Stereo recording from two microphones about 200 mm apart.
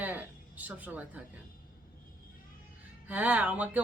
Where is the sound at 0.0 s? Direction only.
10° right (ahead or behind).